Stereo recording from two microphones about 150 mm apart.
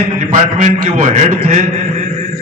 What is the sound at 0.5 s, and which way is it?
A man's voice, 60° right (ahead or behind).